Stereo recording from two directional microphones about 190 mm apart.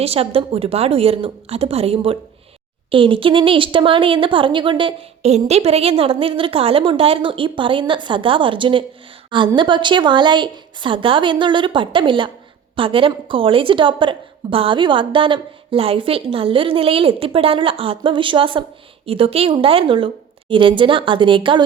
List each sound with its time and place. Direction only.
0.0 s a woman's voice: 30° right (ahead or behind)